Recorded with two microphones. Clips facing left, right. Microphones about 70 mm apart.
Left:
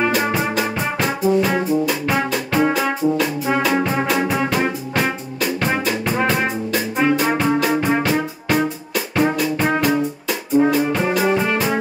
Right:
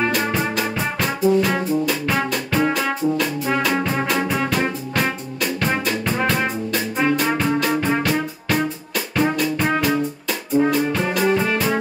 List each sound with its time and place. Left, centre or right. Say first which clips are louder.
0.1 s music: left 2 dB; centre